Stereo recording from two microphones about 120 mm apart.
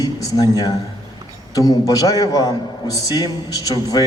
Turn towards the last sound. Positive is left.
turn(degrees=30)  # may be behind; listen again after turning